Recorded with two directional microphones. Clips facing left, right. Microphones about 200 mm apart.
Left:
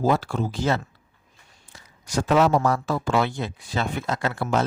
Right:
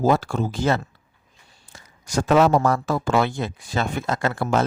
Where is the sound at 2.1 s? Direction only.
45° right (ahead or behind).